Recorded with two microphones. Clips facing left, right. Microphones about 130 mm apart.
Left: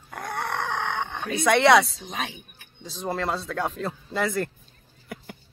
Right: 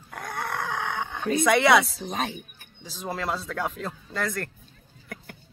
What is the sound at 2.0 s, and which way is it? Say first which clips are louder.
Speech: right 3 dB; 45° right (ahead or behind).